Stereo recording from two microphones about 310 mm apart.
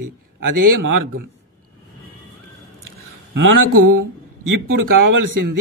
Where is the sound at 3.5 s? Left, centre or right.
Right.